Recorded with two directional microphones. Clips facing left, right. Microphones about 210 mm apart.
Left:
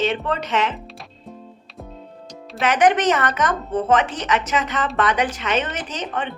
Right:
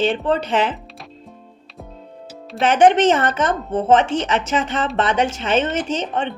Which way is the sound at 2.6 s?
30° right (ahead or behind).